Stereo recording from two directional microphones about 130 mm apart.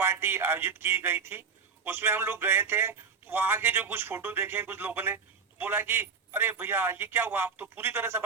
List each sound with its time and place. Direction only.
0.0 s a man's voice: 20° right (ahead or behind)